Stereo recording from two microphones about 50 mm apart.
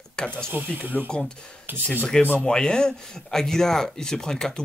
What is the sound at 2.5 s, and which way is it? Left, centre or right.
Speech, centre.